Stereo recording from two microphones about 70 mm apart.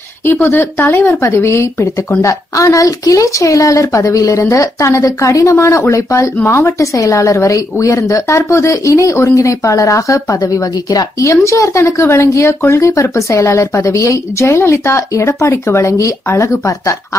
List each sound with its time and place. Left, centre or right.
0.3 s a woman's voice: left
2.5 s speech: left